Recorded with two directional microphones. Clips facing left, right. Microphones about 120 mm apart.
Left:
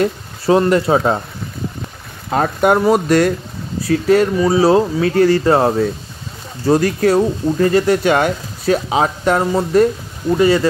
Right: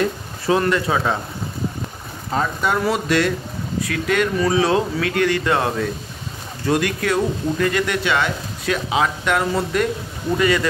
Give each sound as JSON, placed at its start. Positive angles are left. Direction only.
{"t": 0.5, "sound": "speech", "side_deg": 35}
{"t": 2.3, "sound": "speech", "side_deg": 55}